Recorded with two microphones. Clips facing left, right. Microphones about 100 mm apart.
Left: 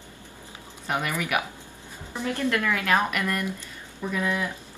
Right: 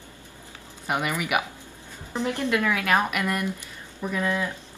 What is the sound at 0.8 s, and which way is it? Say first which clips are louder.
Speech: right 1 dB; 10° right (ahead or behind).